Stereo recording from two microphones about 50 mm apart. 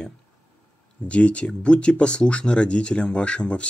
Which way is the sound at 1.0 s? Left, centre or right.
Left.